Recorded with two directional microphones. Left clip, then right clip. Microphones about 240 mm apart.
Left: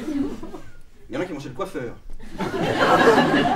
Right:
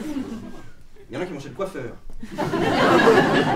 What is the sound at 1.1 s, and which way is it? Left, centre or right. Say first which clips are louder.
Speech: left 2 dB; centre.